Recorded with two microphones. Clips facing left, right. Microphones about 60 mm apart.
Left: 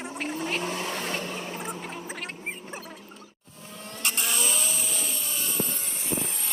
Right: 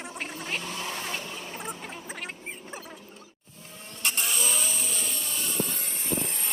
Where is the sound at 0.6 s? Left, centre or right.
Left.